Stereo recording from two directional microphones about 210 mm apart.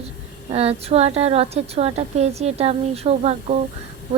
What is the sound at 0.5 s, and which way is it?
A woman's voice, 30° right (ahead or behind).